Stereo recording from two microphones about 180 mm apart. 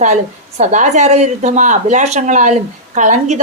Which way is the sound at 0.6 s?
45° right (ahead or behind).